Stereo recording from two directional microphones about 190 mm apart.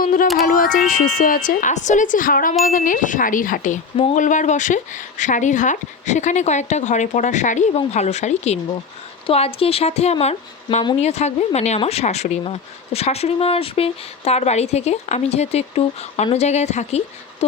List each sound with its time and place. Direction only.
0.0 s music: 45° left (ahead or behind)
0.4 s speech: 45° left (ahead or behind)